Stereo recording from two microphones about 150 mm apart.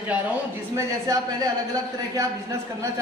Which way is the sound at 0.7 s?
25° right (ahead or behind).